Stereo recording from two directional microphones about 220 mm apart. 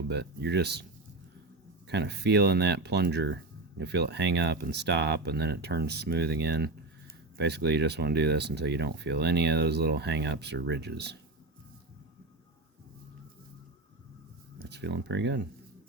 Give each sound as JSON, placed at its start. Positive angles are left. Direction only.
{"t": 0.1, "sound": "speech", "side_deg": -50}
{"t": 1.9, "sound": "speech", "side_deg": -50}
{"t": 14.6, "sound": "speech", "side_deg": -50}